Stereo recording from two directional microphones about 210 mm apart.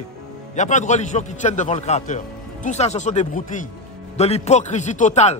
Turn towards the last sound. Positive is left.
turn(degrees=35)  # may be behind; listen again after turning